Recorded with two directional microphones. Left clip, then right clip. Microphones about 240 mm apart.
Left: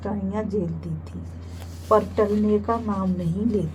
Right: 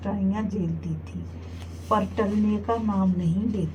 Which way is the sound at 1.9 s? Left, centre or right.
Left.